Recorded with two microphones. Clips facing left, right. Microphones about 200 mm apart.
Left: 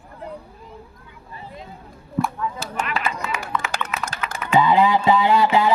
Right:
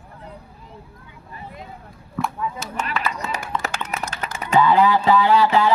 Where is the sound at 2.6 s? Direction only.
30° left (ahead or behind).